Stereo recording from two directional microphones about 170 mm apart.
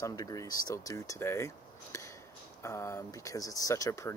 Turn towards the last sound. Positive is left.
turn(degrees=15)  # may be behind; listen again after turning